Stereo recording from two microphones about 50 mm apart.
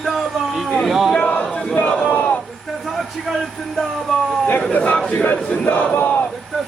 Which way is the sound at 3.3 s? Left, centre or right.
Centre.